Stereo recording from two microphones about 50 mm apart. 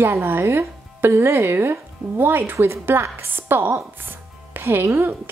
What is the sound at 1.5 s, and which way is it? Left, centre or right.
Speech, right.